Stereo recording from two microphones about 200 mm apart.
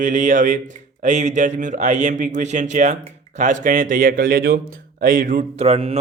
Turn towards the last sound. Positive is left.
turn(degrees=-30)  # may be behind; listen again after turning